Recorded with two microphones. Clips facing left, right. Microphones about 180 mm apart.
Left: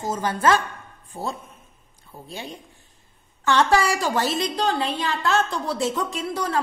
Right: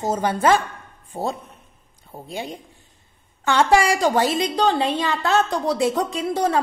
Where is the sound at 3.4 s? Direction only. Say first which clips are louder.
Right 2 dB; 10° right (ahead or behind).